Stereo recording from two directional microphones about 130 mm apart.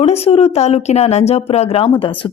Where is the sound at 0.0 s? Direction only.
50° left (ahead or behind).